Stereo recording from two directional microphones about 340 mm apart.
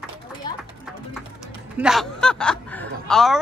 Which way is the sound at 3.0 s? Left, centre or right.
Centre.